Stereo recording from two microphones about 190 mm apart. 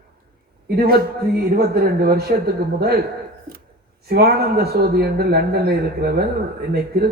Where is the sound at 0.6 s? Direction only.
55° right (ahead or behind).